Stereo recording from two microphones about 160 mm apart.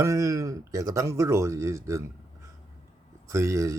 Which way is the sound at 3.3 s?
20° right (ahead or behind).